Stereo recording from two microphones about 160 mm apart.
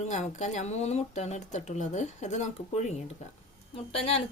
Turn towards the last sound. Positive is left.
turn(degrees=35)  # may be behind; listen again after turning